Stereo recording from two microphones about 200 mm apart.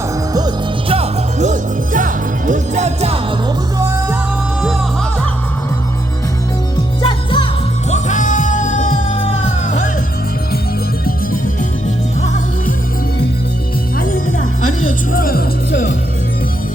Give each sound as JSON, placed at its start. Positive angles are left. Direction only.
{"t": 0.3, "sound": "music", "side_deg": -25}
{"t": 3.8, "sound": "music", "side_deg": -15}
{"t": 4.6, "sound": "music", "side_deg": 0}
{"t": 7.0, "sound": "music", "side_deg": 25}
{"t": 7.9, "sound": "music", "side_deg": 35}
{"t": 12.2, "sound": "music", "side_deg": 35}
{"t": 14.8, "sound": "music", "side_deg": 45}